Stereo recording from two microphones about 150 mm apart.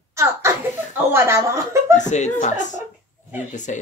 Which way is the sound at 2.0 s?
55° left (ahead or behind).